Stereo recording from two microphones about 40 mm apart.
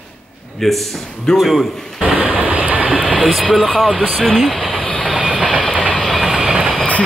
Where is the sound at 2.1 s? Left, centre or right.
Right.